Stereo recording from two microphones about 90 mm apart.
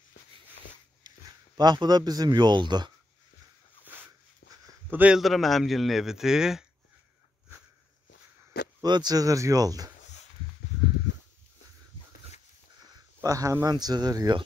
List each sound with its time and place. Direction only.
1.0 s a sound: 50° right (ahead or behind)
1.6 s speech: 50° right (ahead or behind)
3.8 s a sound: 20° right (ahead or behind)
4.9 s a man's voice: 15° right (ahead or behind)
5.2 s speech: centre (ahead or behind)
8.8 s speech: 50° right (ahead or behind)
13.2 s speech: 40° right (ahead or behind)
13.7 s speech: 50° right (ahead or behind)